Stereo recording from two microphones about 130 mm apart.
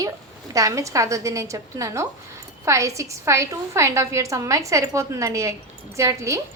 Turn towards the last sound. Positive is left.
turn(degrees=-20)  # may be behind; listen again after turning